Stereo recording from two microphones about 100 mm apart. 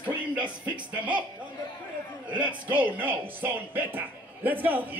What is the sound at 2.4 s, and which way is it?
Speech, 15° right (ahead or behind).